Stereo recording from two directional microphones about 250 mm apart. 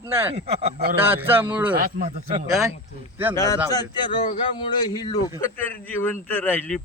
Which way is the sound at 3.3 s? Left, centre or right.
Centre.